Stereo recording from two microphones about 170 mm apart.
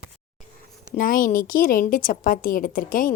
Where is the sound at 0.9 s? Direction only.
50° left (ahead or behind).